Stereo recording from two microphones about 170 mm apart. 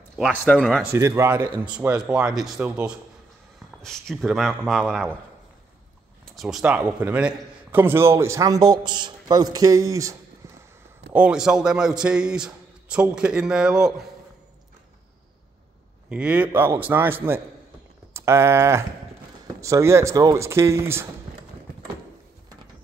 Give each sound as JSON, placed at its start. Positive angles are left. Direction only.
{"t": 0.2, "sound": "a man's voice", "side_deg": 0}
{"t": 0.9, "sound": "a man's voice", "side_deg": -15}
{"t": 6.2, "sound": "a man's voice", "side_deg": 0}
{"t": 11.1, "sound": "a man's voice", "side_deg": -5}
{"t": 16.1, "sound": "a man's voice", "side_deg": -10}